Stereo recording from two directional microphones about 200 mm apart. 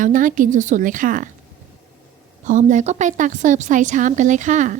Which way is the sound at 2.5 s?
40° right (ahead or behind).